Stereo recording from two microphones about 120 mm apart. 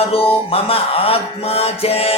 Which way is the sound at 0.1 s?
55° left (ahead or behind).